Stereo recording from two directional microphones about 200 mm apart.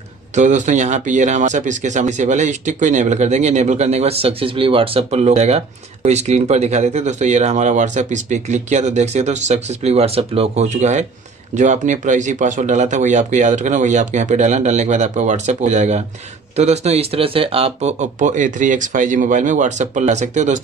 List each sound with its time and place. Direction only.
0.4 s speech: 35° right (ahead or behind)